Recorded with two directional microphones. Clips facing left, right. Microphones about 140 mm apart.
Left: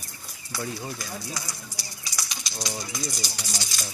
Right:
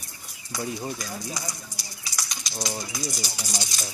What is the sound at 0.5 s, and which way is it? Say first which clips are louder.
Speech: right 2 dB; 20° right (ahead or behind).